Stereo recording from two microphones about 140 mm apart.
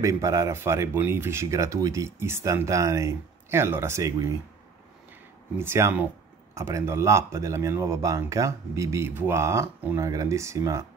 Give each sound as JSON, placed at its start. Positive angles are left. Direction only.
{"t": 0.0, "sound": "speech", "side_deg": -20}
{"t": 5.6, "sound": "speech", "side_deg": -20}